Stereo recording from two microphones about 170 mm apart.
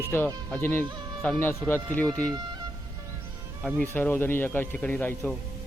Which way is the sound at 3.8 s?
10° left (ahead or behind).